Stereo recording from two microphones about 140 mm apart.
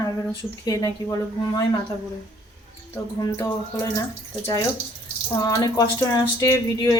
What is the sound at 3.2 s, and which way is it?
Speech, 25° left (ahead or behind).